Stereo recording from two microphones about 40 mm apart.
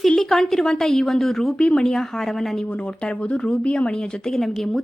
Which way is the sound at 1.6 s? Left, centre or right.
Left.